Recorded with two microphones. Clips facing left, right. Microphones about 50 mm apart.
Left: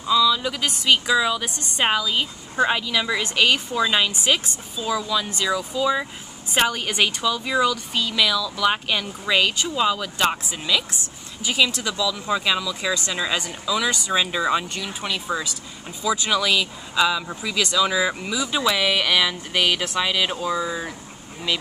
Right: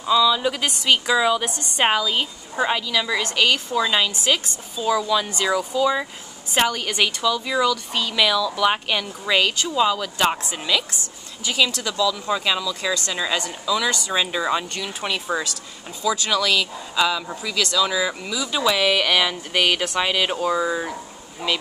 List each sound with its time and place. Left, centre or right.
0.0 s speech: centre
0.7 s a woman's voice: centre
2.7 s speech: centre
4.1 s speech: centre
4.7 s a woman's voice: centre
11.4 s a woman's voice: centre
14.2 s a woman's voice: centre
15.3 s speech: right
16.0 s speech: centre